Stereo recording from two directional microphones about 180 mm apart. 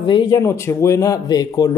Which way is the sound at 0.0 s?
20° left (ahead or behind).